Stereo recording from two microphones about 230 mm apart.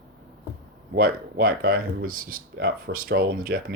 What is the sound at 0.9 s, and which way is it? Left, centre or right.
Speech, right.